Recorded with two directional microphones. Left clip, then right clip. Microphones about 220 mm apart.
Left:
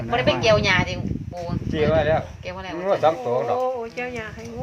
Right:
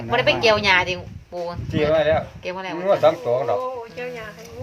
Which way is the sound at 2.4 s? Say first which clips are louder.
Right 4 dB; 50° right (ahead or behind).